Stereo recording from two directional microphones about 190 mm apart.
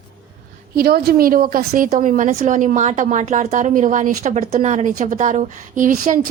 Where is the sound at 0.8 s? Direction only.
55° right (ahead or behind).